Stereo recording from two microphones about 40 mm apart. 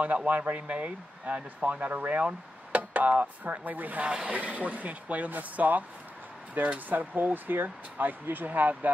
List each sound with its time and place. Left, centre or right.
0.0 s speech: right